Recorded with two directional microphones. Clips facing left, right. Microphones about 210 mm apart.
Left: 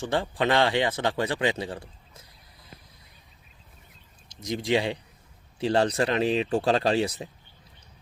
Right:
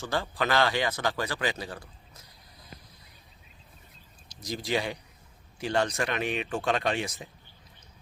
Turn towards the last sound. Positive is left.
turn(degrees=30)  # may be behind; listen again after turning